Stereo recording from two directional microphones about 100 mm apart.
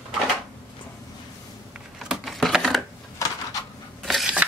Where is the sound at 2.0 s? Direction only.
Centre (ahead or behind).